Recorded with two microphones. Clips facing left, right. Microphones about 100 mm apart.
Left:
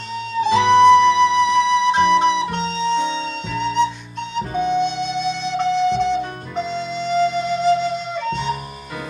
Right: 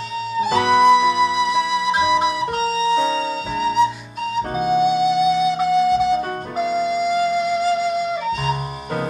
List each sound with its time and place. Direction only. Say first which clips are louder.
0.5 s music: left 3 dB; 45° right (ahead or behind)
0.7 s flute: left 3 dB; 5° right (ahead or behind)
3.5 s music: right 1 dB; 5° right (ahead or behind)
4.4 s music: even; 50° right (ahead or behind)
4.7 s music: right 5 dB; 5° right (ahead or behind)